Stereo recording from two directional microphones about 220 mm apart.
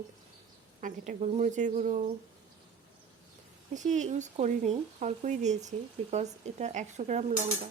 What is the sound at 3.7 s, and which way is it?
Speech, 35° right (ahead or behind).